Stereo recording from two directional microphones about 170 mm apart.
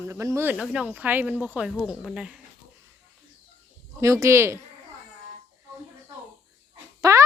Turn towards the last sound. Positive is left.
turn(degrees=-15)  # may be behind; listen again after turning